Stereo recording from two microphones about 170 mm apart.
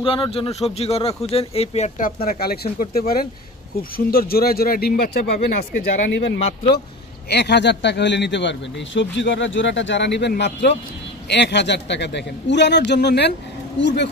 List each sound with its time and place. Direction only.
0.0 s speech: 30° left (ahead or behind)
2.0 s speech: 55° left (ahead or behind); by 13.3 s 80° left
13.7 s speech: 90° left